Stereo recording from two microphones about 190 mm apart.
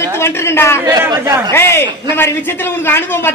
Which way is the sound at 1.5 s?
15° left (ahead or behind).